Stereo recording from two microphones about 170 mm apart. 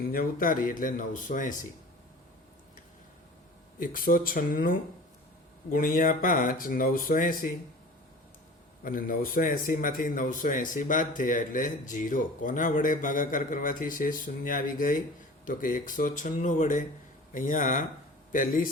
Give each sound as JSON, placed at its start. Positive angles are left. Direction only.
{"t": 0.1, "sound": "a man's voice", "side_deg": 55}
{"t": 3.8, "sound": "speech", "side_deg": 55}
{"t": 8.8, "sound": "a man's voice", "side_deg": 55}